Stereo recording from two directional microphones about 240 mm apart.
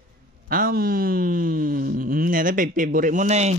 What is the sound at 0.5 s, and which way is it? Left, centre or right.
Speech, right.